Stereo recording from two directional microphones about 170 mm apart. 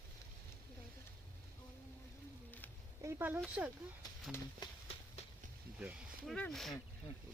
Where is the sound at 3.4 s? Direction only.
5° right (ahead or behind).